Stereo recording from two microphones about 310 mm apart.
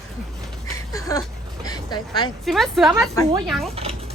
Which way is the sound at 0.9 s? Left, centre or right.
Centre.